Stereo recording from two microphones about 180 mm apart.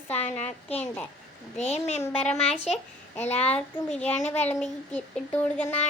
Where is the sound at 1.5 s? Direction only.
40° left (ahead or behind).